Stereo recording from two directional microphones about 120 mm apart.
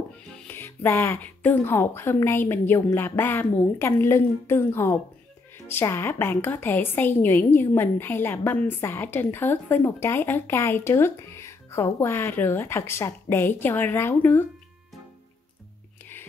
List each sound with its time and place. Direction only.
0.5 s a woman's voice: 20° left (ahead or behind)